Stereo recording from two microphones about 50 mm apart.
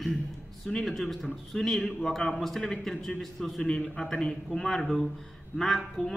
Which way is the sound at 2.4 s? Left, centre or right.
Centre.